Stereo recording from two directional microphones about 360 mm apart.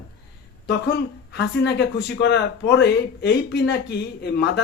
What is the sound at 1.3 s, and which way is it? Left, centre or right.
Speech, left.